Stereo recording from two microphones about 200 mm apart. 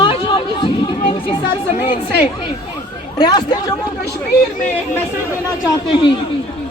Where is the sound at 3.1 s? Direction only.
20° left (ahead or behind).